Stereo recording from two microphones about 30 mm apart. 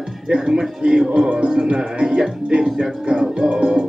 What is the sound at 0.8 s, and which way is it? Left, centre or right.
Music, right.